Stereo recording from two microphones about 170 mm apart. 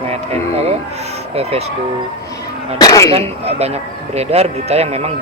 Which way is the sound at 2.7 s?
20° left (ahead or behind).